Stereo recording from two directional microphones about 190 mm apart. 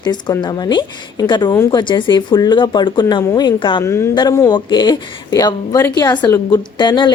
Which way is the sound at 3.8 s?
15° left (ahead or behind).